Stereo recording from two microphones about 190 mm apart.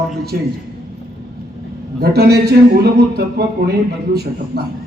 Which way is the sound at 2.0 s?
55° right (ahead or behind).